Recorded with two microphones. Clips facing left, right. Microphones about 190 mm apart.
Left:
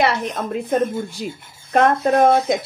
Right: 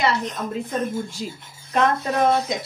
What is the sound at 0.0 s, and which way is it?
Speech, 65° left (ahead or behind).